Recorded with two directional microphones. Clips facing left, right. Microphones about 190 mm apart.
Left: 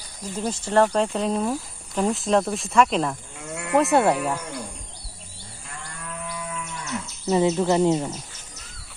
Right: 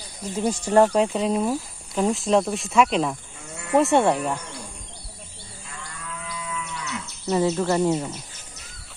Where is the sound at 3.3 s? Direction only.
65° left (ahead or behind).